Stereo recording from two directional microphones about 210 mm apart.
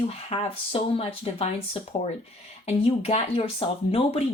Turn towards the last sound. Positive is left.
turn(degrees=25)  # may be behind; listen again after turning